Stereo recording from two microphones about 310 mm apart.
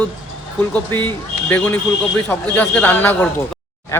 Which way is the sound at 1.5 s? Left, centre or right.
Centre.